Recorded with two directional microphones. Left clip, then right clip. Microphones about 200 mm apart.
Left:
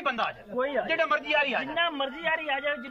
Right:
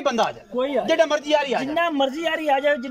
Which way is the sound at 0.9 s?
35° right (ahead or behind).